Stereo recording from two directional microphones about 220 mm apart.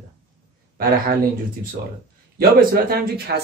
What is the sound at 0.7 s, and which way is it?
Speech, 45° right (ahead or behind).